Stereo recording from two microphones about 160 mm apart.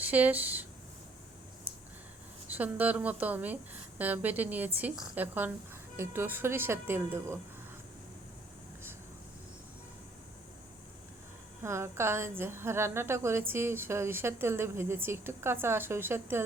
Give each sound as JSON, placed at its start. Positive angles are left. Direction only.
{"t": 0.0, "sound": "speech", "side_deg": -10}
{"t": 2.5, "sound": "a woman's voice", "side_deg": -10}
{"t": 11.6, "sound": "a woman's voice", "side_deg": -15}